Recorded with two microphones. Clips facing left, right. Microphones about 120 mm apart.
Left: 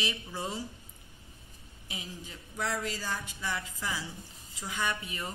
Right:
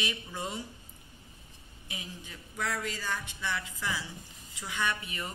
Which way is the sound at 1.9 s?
35° left (ahead or behind).